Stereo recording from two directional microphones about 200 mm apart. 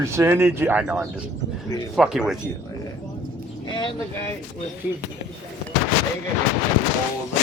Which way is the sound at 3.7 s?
25° left (ahead or behind).